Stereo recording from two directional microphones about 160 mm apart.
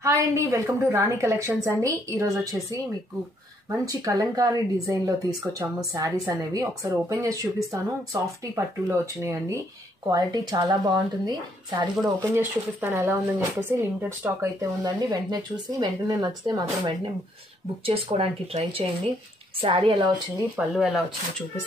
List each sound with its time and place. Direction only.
0.0 s speech: 20° right (ahead or behind)
3.8 s speech: 20° right (ahead or behind)
12.2 s speech: 15° right (ahead or behind); by 20.1 s 30° right (ahead or behind)
20.5 s speech: centre (ahead or behind)